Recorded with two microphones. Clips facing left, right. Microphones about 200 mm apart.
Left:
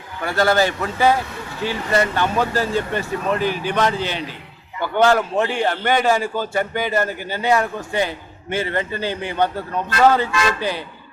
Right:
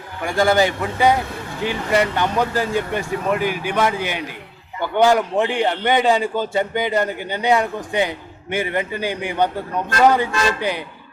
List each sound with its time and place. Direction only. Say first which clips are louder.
0.3 s a man's voice: right 1 dB; 15° right (ahead or behind)